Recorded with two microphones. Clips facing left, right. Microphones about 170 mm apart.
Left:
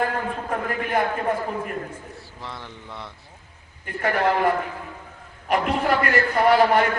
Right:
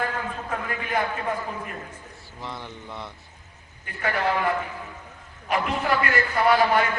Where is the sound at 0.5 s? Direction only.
45° left (ahead or behind).